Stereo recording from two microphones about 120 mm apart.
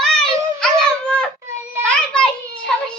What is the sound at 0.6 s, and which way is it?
Wail, 10° left (ahead or behind).